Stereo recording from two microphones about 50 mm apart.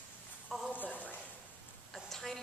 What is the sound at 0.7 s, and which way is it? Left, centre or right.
Speech, left.